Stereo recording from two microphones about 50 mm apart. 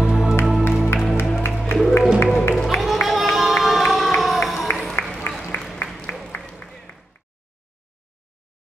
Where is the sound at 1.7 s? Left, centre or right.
Left.